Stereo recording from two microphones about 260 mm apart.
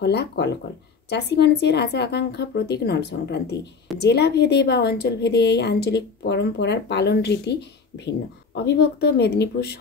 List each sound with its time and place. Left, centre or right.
0.0 s a woman's voice: left